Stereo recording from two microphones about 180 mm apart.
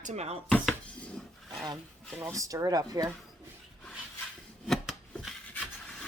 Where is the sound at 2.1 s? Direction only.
15° right (ahead or behind).